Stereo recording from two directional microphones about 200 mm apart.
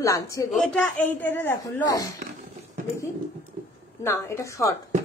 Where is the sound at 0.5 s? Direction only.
5° left (ahead or behind).